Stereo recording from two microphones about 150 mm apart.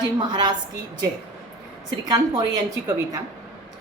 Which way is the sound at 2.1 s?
25° right (ahead or behind).